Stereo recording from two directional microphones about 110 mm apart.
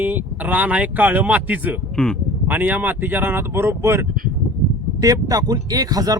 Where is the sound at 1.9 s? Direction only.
5° left (ahead or behind).